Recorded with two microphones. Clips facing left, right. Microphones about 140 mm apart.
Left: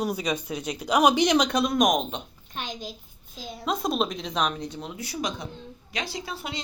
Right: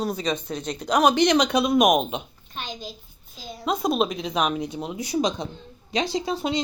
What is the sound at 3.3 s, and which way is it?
Speech, centre (ahead or behind).